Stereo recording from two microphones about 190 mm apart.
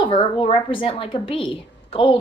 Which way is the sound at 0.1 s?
25° left (ahead or behind).